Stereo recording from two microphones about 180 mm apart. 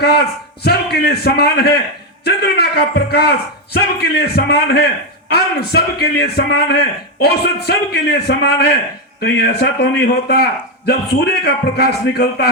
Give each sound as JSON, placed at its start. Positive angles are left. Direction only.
{"t": 0.9, "sound": "a man's voice", "side_deg": 60}